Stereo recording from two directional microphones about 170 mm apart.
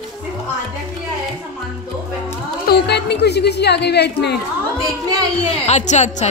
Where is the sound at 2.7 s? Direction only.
75° left (ahead or behind).